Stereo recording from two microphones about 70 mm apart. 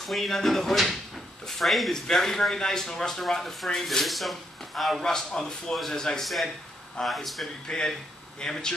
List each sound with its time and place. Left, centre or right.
0.0 s speech: centre
7.6 s speech: centre